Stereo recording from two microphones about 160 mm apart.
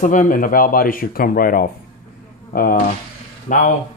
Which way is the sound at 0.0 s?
55° left (ahead or behind).